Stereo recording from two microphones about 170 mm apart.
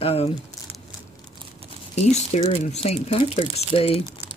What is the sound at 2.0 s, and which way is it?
Speech, 40° left (ahead or behind).